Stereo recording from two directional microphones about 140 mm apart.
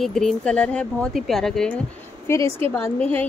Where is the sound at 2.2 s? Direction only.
20° left (ahead or behind).